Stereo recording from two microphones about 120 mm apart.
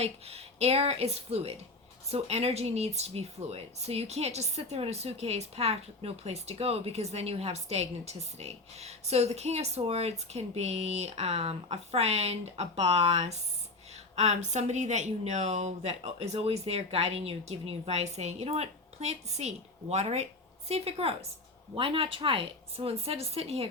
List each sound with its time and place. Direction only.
0.0 s a woman's voice: 55° right (ahead or behind)